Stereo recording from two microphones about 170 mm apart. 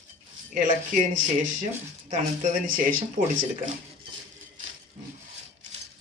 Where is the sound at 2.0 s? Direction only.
50° right (ahead or behind).